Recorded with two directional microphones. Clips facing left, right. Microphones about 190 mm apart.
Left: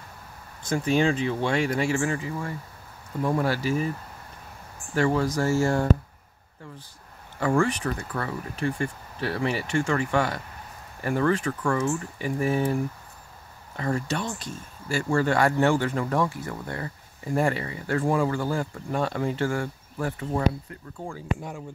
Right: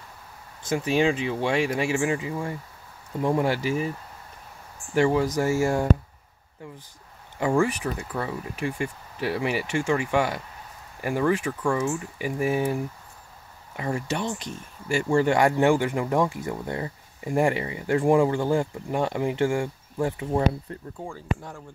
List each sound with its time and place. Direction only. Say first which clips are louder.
0.7 s speech: even; 15° right (ahead or behind)
4.9 s speech: right 2 dB; 15° right (ahead or behind)
7.3 s speech: right 1 dB; 15° right (ahead or behind)
21.4 s speech: left 4 dB; 15° left (ahead or behind)